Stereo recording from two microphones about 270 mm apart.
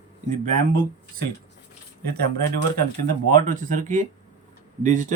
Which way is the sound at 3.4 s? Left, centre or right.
Right.